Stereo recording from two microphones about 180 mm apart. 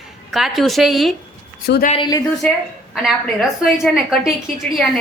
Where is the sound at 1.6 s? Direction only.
60° left (ahead or behind).